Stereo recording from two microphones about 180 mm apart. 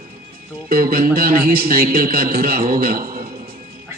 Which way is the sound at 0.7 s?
55° right (ahead or behind).